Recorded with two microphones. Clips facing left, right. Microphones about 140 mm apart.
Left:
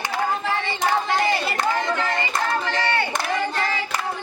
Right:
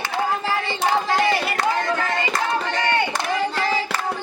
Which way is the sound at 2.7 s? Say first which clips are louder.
Right 1 dB; 15° right (ahead or behind).